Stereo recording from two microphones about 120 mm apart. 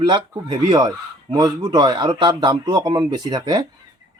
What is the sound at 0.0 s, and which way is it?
Speech, 35° right (ahead or behind).